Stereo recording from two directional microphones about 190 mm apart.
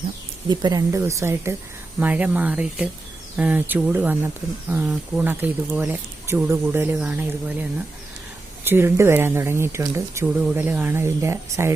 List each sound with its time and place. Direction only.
0.4 s speech: 20° right (ahead or behind)